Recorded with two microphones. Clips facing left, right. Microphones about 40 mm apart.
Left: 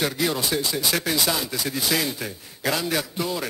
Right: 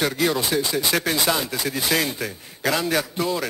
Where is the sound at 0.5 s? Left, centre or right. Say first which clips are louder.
Right 3 dB; centre.